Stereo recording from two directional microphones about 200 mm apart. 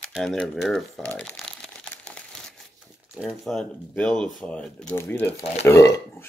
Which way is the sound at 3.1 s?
Centre (ahead or behind).